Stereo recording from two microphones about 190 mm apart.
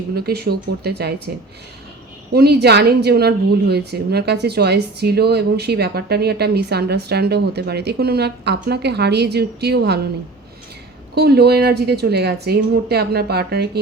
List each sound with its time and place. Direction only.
0.1 s a woman's voice: 55° right (ahead or behind)
2.3 s a woman's voice: 55° right (ahead or behind)
11.1 s a woman's voice: 60° right (ahead or behind)